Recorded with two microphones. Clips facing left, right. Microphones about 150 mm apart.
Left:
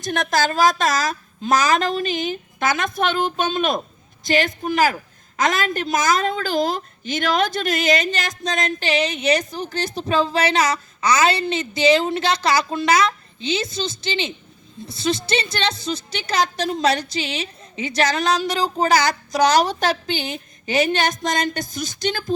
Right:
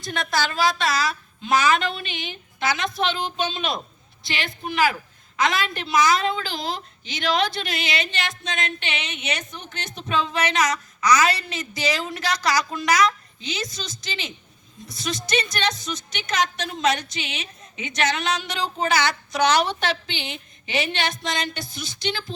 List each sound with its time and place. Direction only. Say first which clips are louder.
0.1 s a woman's voice: left 5 dB; 45° left (ahead or behind)